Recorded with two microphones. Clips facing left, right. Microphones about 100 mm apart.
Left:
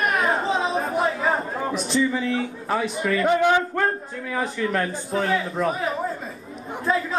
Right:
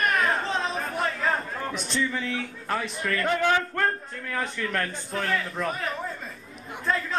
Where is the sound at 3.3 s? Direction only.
20° left (ahead or behind).